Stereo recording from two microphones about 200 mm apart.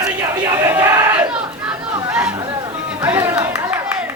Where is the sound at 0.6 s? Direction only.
10° right (ahead or behind).